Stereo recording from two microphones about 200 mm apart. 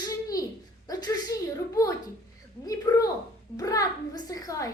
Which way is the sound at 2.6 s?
15° left (ahead or behind).